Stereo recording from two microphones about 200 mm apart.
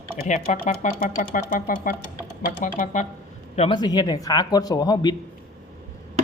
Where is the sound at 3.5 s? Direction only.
25° left (ahead or behind).